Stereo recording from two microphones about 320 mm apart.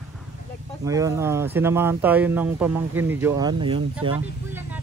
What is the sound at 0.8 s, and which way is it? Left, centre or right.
Speech, centre.